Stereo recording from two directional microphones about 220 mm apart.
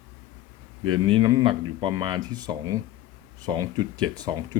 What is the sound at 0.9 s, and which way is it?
Speech, 20° right (ahead or behind).